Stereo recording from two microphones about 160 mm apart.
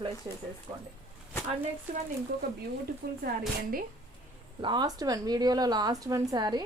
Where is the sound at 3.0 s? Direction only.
85° right.